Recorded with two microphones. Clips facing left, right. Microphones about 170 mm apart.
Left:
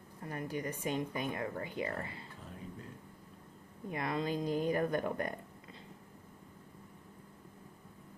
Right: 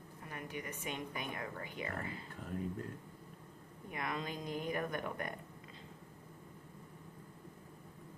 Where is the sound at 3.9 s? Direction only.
30° left (ahead or behind).